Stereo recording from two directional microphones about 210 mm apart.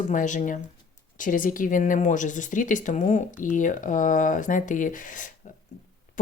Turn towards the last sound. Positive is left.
turn(degrees=40)  # may be behind; listen again after turning